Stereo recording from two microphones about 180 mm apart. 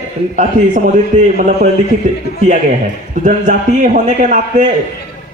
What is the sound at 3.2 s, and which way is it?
A man's voice, 45° right (ahead or behind).